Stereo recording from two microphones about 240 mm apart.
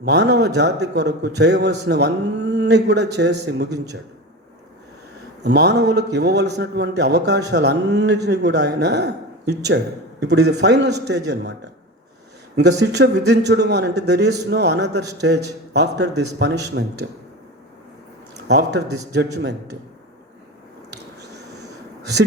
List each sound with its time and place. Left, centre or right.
0.0 s a man's voice: right
5.4 s a man's voice: right
12.8 s a man's voice: right
18.3 s a man's voice: right